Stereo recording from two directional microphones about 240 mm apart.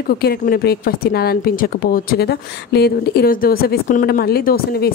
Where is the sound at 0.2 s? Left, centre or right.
Left.